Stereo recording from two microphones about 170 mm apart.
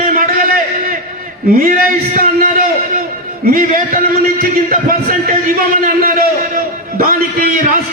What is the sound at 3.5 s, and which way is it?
A man's voice, 55° right (ahead or behind).